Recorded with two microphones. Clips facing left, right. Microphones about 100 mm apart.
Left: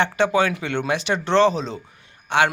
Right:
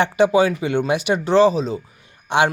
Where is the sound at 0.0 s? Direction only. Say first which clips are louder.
Right 4 dB; 15° right (ahead or behind).